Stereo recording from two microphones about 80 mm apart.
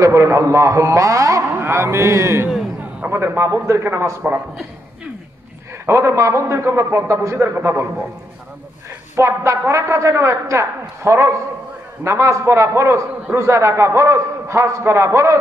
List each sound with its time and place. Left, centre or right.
0.0 s a man's voice: right
3.6 s a man's voice: right
5.9 s a man's voice: right
9.1 s a man's voice: right